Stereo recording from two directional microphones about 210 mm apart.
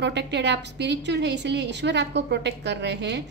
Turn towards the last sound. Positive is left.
turn(degrees=-55)  # may be behind; listen again after turning